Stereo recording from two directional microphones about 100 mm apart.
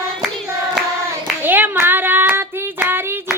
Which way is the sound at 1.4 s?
20° right (ahead or behind).